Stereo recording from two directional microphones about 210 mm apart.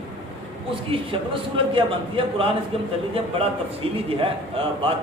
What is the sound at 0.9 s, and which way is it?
A man's voice, 25° right (ahead or behind).